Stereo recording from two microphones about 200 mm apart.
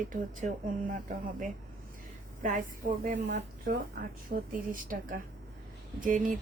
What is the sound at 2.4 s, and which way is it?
A woman's voice, 40° right (ahead or behind).